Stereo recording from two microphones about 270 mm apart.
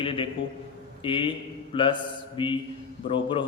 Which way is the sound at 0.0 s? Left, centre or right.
Centre.